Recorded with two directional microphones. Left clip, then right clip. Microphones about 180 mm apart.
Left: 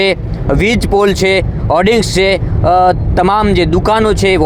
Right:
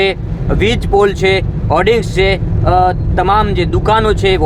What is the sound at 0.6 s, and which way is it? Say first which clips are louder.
Speech: even; 30° left (ahead or behind).